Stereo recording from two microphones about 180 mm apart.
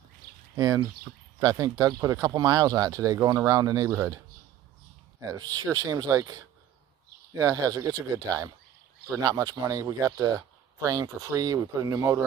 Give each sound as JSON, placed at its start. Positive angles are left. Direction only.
{"t": 0.6, "sound": "speech", "side_deg": -15}
{"t": 5.3, "sound": "speech", "side_deg": -20}